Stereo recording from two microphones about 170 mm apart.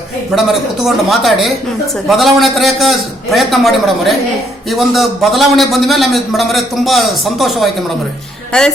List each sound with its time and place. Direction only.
0.3 s a man's voice: centre (ahead or behind)